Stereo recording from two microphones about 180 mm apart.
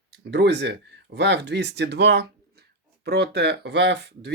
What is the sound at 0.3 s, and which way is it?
Speech, 70° right (ahead or behind).